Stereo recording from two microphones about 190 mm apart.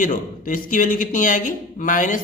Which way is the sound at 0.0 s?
45° left (ahead or behind).